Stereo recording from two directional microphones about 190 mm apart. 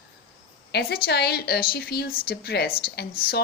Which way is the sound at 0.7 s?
55° left (ahead or behind).